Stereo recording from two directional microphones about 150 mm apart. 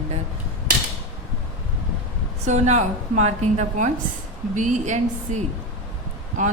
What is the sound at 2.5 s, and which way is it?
A woman's voice, 50° right (ahead or behind).